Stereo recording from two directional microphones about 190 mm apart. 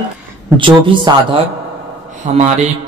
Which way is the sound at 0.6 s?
25° right (ahead or behind).